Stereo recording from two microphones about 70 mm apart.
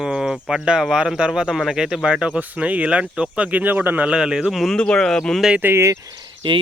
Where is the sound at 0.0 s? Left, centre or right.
Centre.